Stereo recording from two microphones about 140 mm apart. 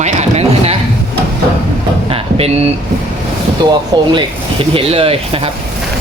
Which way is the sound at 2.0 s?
45° right (ahead or behind).